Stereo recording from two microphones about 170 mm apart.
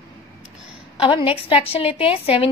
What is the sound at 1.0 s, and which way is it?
A woman's voice, 30° left (ahead or behind).